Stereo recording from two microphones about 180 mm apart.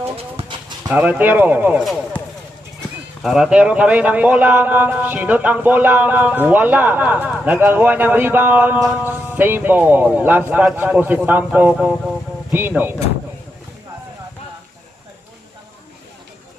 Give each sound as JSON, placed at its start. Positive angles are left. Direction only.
{"t": 0.0, "sound": "clip-clop", "side_deg": -30}
{"t": 0.9, "sound": "a man's voice", "side_deg": -10}
{"t": 3.2, "sound": "a man's voice", "side_deg": -5}